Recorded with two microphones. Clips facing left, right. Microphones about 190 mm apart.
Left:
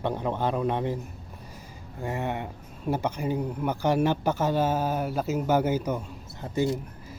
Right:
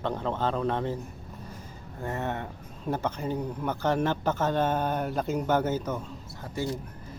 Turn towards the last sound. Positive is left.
turn(degrees=20)  # may be behind; listen again after turning